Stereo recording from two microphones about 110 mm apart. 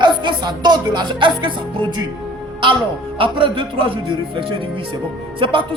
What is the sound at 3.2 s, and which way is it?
Speech, 50° right (ahead or behind).